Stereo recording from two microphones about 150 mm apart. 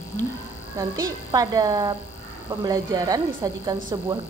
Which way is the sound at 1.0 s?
25° right (ahead or behind).